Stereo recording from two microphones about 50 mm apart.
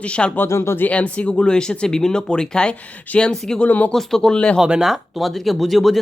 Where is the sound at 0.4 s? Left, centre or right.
Left.